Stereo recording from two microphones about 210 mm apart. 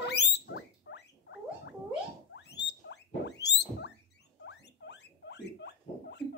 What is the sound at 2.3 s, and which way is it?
Rodents, 55° left (ahead or behind).